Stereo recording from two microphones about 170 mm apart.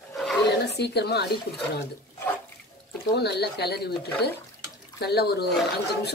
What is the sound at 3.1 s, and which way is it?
Speech, 75° left (ahead or behind).